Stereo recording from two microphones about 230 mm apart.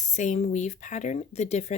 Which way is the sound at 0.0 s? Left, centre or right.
Left.